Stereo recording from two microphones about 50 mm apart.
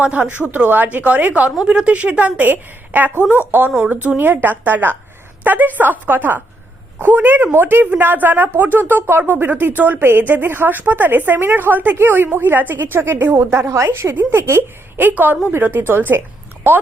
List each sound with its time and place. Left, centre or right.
0.0 s a woman's voice: right
4.2 s speech: right
13.4 s a woman's voice: right
13.8 s a woman's voice: right
15.0 s speech: right